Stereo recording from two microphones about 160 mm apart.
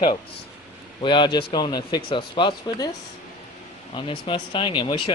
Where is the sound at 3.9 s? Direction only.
35° left (ahead or behind).